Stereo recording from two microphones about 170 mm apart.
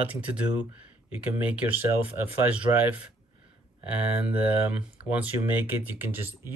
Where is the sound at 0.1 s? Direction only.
10° right (ahead or behind).